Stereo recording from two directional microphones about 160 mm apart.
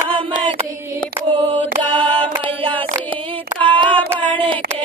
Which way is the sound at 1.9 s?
35° right (ahead or behind).